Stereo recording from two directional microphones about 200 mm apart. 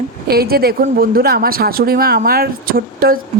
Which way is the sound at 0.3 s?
50° right (ahead or behind).